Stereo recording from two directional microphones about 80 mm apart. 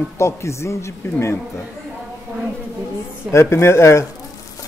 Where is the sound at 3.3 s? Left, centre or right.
Left.